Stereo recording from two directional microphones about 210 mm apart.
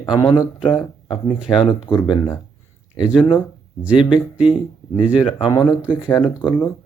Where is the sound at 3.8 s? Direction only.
5° right (ahead or behind).